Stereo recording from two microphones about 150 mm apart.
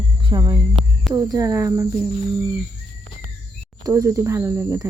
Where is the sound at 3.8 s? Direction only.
20° right (ahead or behind).